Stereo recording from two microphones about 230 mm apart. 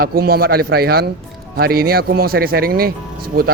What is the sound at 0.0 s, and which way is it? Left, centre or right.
A man's voice, right.